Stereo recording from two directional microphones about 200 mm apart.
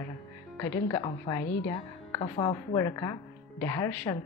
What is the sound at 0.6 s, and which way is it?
A woman's voice, 15° left (ahead or behind).